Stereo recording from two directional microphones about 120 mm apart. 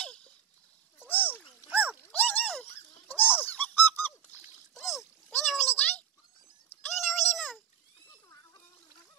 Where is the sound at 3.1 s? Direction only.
15° left (ahead or behind).